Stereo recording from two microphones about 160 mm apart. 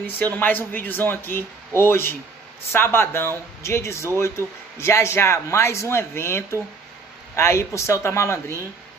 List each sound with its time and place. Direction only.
0.0 s speech: 10° left (ahead or behind)